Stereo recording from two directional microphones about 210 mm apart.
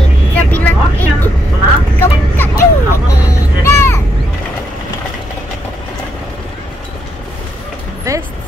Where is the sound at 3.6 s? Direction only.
10° left (ahead or behind).